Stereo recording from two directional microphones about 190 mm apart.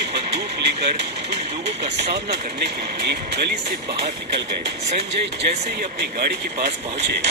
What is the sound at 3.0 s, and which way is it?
Speech, 60° right (ahead or behind).